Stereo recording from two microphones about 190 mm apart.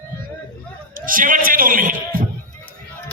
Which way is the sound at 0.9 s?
45° right (ahead or behind).